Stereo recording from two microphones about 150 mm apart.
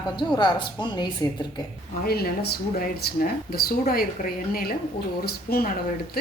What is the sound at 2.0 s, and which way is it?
Speech, 90° left.